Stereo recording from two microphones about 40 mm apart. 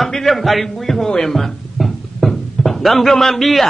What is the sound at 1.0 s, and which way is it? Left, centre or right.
Speech, centre.